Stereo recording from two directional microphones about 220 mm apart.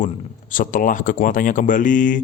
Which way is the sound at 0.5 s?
35° left (ahead or behind).